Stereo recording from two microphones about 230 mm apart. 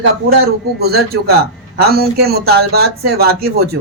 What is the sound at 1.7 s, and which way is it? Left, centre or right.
Speech, right.